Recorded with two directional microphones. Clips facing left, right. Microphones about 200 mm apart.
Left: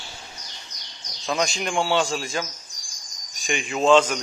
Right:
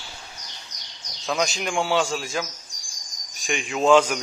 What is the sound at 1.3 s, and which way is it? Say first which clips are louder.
Speech: even; centre (ahead or behind).